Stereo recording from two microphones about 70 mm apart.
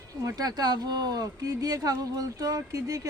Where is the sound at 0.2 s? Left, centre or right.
Right.